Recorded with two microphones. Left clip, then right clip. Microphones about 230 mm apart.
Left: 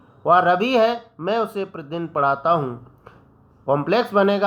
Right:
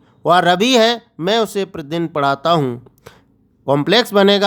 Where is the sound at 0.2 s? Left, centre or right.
Right.